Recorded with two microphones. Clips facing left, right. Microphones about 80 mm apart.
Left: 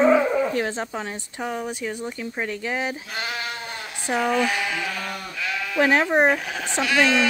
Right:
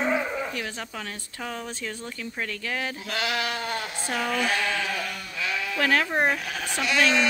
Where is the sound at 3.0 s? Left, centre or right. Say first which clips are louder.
Right 2 dB; right.